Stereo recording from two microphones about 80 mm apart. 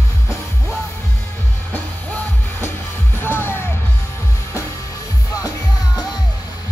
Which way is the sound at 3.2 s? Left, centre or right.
Left.